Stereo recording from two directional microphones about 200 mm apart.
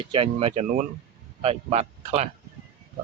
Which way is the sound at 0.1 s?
30° right (ahead or behind).